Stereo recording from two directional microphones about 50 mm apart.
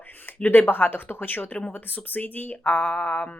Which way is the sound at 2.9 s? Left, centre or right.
Left.